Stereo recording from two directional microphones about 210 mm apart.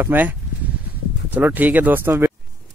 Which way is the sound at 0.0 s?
10° right (ahead or behind).